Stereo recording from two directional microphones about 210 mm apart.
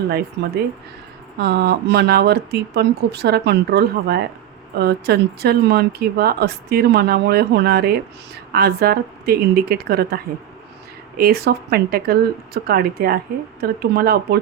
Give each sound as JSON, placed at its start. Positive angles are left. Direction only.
{"t": 0.4, "sound": "speech", "side_deg": -55}
{"t": 11.2, "sound": "speech", "side_deg": -50}